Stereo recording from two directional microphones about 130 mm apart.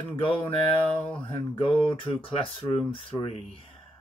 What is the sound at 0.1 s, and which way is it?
Speech, 45° left (ahead or behind).